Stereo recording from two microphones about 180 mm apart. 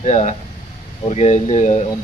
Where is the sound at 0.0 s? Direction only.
40° left (ahead or behind).